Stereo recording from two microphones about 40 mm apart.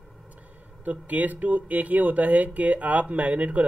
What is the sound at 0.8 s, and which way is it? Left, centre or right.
Speech, right.